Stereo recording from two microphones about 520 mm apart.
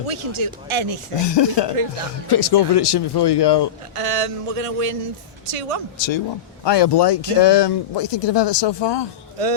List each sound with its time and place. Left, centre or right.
0.1 s speech: right
1.3 s speech: left
3.9 s speech: right
5.5 s speech: right
6.0 s speech: left
9.4 s speech: right